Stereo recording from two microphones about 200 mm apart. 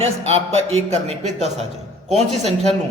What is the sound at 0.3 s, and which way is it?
A man's voice, 30° right (ahead or behind).